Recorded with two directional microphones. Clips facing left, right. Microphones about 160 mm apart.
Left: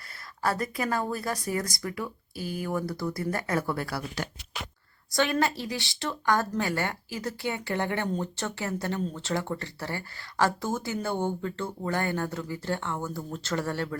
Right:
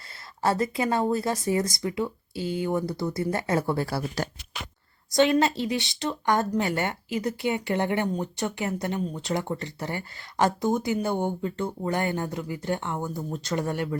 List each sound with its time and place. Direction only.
0.4 s speech: 25° right (ahead or behind)